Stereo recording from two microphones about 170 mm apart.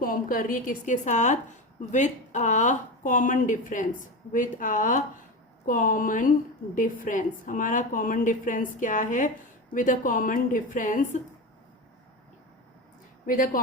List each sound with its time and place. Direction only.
0.0 s a woman's voice: 55° left (ahead or behind)
13.2 s speech: 55° left (ahead or behind)